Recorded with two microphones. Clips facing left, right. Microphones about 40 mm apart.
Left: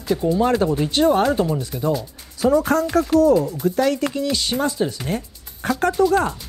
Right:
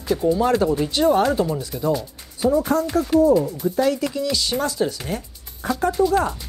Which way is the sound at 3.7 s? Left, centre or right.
Left.